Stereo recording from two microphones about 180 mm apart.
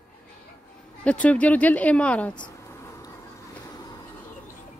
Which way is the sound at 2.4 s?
15° left (ahead or behind).